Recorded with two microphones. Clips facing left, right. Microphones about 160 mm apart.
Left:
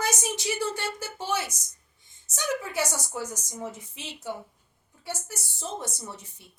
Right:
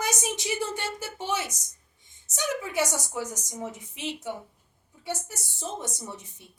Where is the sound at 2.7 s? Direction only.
20° right (ahead or behind).